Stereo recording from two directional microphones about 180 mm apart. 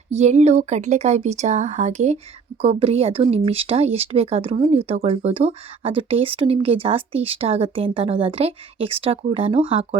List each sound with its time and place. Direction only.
0.1 s speech: 40° right (ahead or behind)